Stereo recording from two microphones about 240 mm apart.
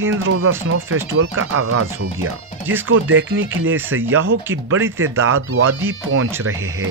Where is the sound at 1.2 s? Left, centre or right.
Right.